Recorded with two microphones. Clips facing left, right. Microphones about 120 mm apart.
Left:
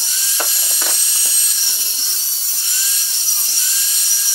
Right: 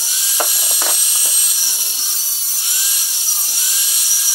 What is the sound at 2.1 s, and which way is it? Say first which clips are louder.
Dental drill: right 1 dB; 10° right (ahead or behind).